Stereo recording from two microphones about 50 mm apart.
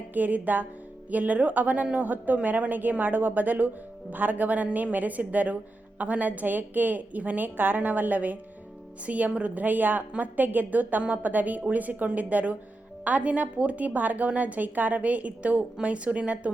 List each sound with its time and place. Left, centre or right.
0.1 s a woman's voice: right